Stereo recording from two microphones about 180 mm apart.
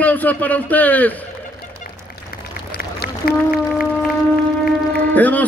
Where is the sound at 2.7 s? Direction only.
60° left (ahead or behind).